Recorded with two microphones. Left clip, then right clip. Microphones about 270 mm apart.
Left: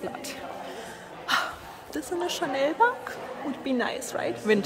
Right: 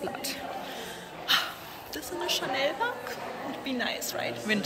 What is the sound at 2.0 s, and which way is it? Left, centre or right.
A woman's voice, left.